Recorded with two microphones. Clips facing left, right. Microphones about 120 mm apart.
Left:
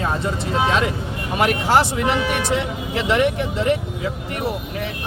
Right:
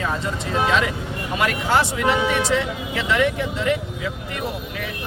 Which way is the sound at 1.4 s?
30° left (ahead or behind).